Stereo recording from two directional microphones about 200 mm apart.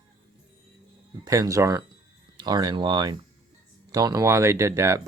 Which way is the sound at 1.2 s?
15° right (ahead or behind).